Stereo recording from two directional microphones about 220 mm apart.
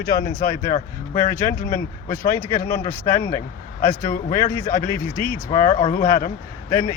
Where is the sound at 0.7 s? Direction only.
30° left (ahead or behind).